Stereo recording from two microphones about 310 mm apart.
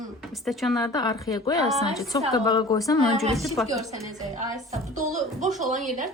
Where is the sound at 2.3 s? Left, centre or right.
Centre.